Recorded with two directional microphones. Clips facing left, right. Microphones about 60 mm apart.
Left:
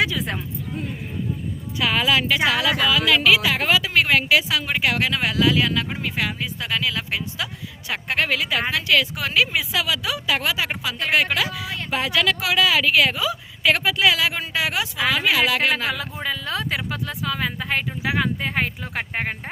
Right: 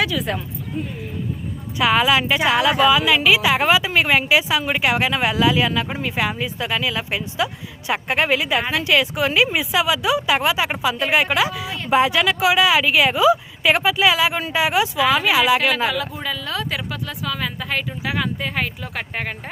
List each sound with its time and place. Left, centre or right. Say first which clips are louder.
0.0 s speech: right 1 dB; left
1.8 s a woman's voice: right 4 dB; centre
15.9 s speech: right 2 dB; left